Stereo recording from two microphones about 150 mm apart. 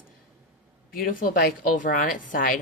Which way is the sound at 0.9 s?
70° left (ahead or behind).